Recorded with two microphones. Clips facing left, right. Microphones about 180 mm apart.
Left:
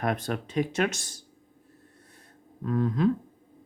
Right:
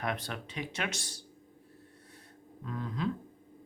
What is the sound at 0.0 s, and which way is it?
Speech, 45° left (ahead or behind).